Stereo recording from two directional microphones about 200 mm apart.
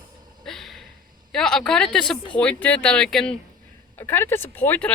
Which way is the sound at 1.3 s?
5° left (ahead or behind).